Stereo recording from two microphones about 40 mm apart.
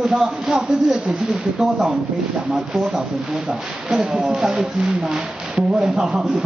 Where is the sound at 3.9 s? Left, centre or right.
Centre.